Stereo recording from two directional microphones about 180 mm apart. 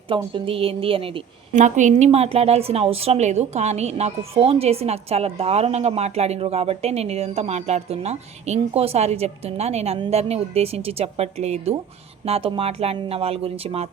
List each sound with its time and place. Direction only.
0.3 s a woman's voice: 30° right (ahead or behind)
1.5 s a woman's voice: 45° right (ahead or behind)